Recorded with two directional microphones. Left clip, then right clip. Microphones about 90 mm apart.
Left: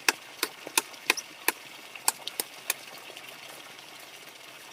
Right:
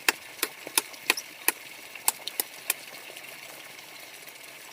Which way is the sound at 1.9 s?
35° right (ahead or behind).